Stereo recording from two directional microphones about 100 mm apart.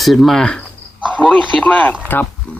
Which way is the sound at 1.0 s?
10° right (ahead or behind).